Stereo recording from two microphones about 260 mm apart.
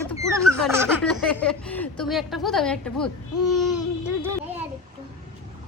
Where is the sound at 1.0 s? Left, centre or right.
Centre.